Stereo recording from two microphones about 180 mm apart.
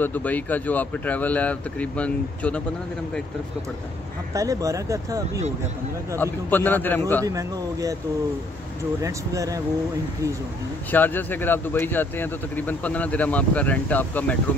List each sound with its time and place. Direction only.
0.0 s speech: 10° left (ahead or behind)
4.3 s speech: 20° right (ahead or behind)
6.1 s speech: 10° left (ahead or behind)
7.2 s speech: 20° right (ahead or behind)
9.0 s speech: 20° right (ahead or behind)
10.9 s speech: 10° left (ahead or behind)